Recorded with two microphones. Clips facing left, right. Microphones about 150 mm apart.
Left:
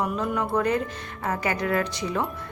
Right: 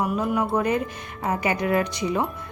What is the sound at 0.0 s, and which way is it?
A woman's voice, 10° right (ahead or behind).